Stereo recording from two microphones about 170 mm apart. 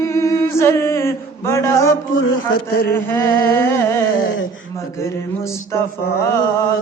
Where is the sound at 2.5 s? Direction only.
60° left (ahead or behind).